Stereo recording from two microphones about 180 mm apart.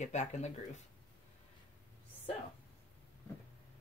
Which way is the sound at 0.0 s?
40° left (ahead or behind).